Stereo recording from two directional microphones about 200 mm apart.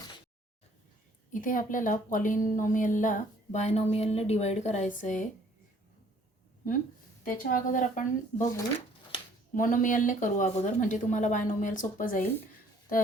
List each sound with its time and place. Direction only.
1.3 s a woman's voice: 40° left (ahead or behind)
7.3 s a woman's voice: 40° left (ahead or behind)
9.6 s a woman's voice: 40° left (ahead or behind)